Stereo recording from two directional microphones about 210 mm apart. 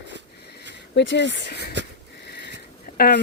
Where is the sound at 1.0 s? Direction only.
55° left (ahead or behind).